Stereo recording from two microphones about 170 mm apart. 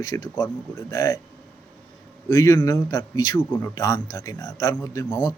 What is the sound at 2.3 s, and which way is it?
A man's voice, 20° left (ahead or behind).